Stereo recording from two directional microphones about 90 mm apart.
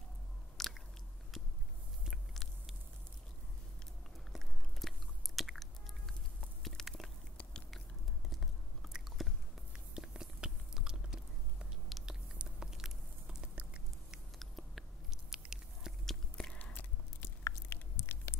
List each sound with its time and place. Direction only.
0.6 s biting: centre (ahead or behind)
2.0 s biting: centre (ahead or behind)
4.3 s biting: centre (ahead or behind)
6.6 s a sound: 5° left (ahead or behind)
8.3 s biting: 5° right (ahead or behind)
16.1 s whispering: 10° left (ahead or behind)
16.5 s biting: 20° left (ahead or behind)